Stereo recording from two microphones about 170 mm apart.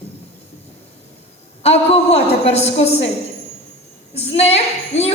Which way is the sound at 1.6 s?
40° left (ahead or behind).